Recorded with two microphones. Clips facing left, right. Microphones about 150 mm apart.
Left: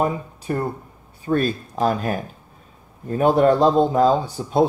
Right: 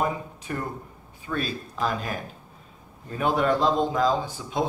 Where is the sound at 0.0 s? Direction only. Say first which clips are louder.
Left 5 dB; 35° left (ahead or behind).